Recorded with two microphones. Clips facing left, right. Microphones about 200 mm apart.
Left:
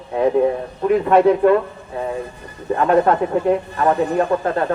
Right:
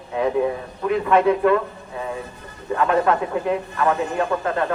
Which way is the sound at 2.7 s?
35° left (ahead or behind).